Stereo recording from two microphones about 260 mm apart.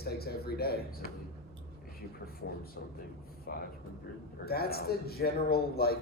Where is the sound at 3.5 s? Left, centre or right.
Left.